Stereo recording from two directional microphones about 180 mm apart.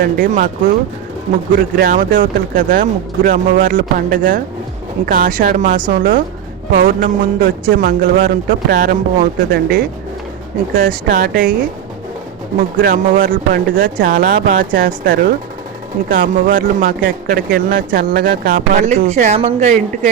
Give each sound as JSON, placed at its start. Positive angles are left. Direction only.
{"t": 0.0, "sound": "speech", "side_deg": -45}
{"t": 18.9, "sound": "speech", "side_deg": -40}